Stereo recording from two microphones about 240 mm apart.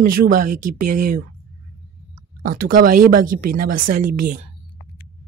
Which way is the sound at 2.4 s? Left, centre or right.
Right.